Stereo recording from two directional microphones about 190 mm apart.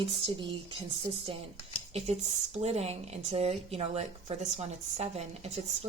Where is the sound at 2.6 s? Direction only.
35° right (ahead or behind).